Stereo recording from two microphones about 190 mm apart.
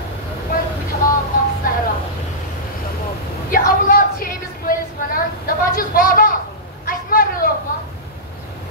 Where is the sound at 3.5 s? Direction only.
50° left (ahead or behind).